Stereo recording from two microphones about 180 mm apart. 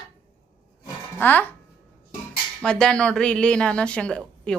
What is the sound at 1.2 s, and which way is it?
Speech, 10° left (ahead or behind).